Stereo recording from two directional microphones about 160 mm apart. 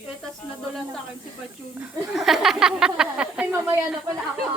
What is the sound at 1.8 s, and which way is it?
A woman's voice, 5° right (ahead or behind).